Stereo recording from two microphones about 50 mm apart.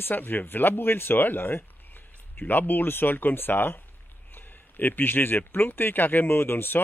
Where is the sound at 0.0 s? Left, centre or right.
Left.